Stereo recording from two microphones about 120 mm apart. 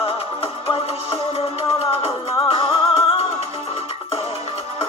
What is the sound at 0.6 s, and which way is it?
Music, 55° left (ahead or behind).